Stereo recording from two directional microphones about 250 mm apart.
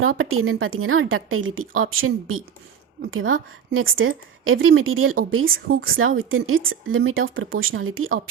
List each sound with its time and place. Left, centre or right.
0.0 s a woman's voice: right